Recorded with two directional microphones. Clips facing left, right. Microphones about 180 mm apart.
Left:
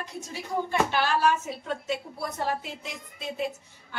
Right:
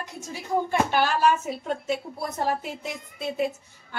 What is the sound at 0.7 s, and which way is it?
Speech, 50° right (ahead or behind).